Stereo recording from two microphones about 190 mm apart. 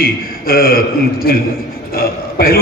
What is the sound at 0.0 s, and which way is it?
A man's voice, 50° left (ahead or behind).